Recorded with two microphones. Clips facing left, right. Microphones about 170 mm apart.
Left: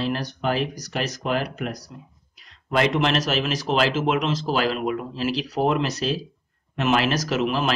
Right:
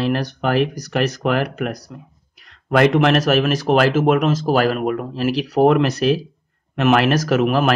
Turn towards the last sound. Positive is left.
turn(degrees=-55)  # may be behind; listen again after turning